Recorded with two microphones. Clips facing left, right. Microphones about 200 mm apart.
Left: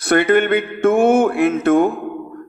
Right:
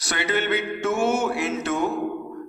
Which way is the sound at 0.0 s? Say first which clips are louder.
Left 11 dB; 55° left (ahead or behind).